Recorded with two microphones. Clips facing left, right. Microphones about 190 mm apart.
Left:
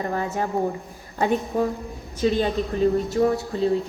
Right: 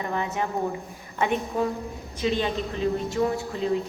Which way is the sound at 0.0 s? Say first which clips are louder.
Left 2 dB; 40° left (ahead or behind).